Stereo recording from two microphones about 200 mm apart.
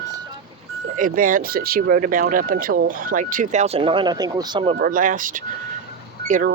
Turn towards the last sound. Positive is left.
turn(degrees=-40)  # may be behind; listen again after turning